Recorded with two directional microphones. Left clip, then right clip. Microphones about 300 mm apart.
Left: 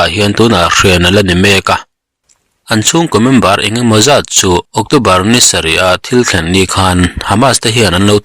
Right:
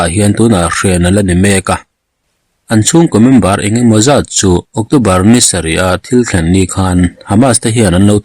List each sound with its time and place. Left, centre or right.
0.0 s speech: centre
4.5 s speech: left
4.9 s speech: centre